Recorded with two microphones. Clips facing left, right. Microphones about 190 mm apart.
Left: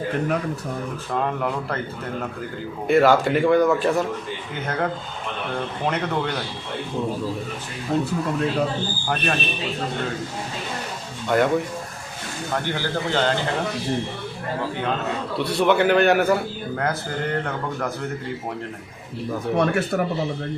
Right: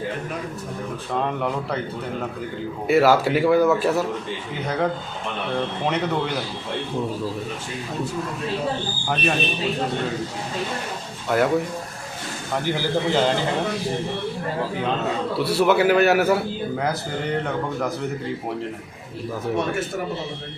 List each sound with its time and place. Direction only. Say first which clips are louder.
1.1 s a man's voice: even; centre (ahead or behind)
2.8 s a man's voice: even; 5° right (ahead or behind)
9.0 s a man's voice: right 2 dB; centre (ahead or behind)
11.3 s a man's voice: left 1 dB; centre (ahead or behind)
12.6 s a man's voice: right 3 dB; 5° right (ahead or behind)
15.4 s a man's voice: even; 5° right (ahead or behind)
19.5 s speech: left 6 dB; 65° left (ahead or behind)